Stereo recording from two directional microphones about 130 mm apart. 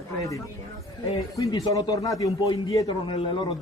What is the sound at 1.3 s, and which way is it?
A man's voice, 25° left (ahead or behind).